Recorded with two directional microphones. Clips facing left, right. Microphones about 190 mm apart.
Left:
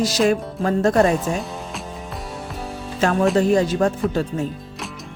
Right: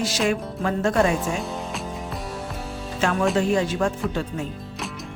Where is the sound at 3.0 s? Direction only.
40° left (ahead or behind).